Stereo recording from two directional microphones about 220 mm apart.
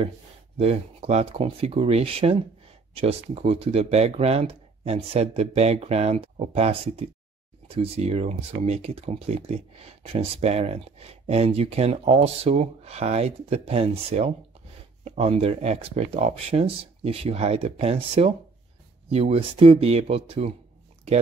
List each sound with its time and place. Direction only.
0.6 s speech: 30° right (ahead or behind)